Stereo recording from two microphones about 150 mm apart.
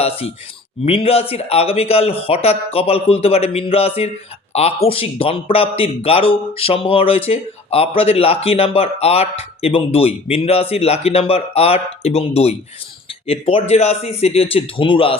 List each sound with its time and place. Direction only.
0.0 s speech: 40° left (ahead or behind)